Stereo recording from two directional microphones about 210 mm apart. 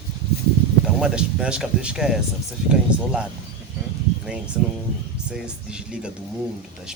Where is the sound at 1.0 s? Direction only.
5° right (ahead or behind).